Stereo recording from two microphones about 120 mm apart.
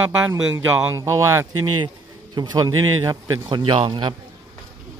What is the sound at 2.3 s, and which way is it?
A man's voice, 35° right (ahead or behind).